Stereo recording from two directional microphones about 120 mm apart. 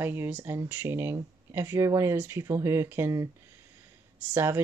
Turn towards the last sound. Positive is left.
turn(degrees=-20)  # may be behind; listen again after turning